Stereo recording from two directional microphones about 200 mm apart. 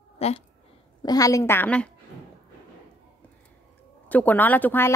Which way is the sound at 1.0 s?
20° left (ahead or behind).